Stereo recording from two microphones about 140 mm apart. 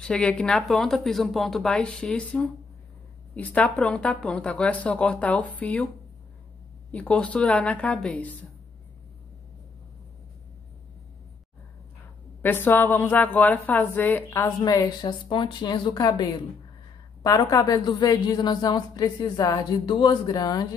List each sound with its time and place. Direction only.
0.0 s a woman's voice: 5° left (ahead or behind)
6.9 s a woman's voice: 10° left (ahead or behind)
12.4 s a woman's voice: 15° left (ahead or behind)
14.6 s a woman's voice: 25° left (ahead or behind)